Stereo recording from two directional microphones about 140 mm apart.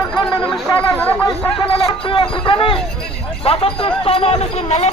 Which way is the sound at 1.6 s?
40° left (ahead or behind).